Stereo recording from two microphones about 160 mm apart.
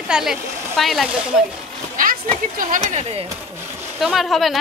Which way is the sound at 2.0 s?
60° right (ahead or behind).